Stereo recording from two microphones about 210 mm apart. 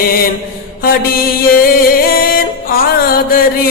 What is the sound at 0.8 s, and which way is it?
Mantra, 45° left (ahead or behind).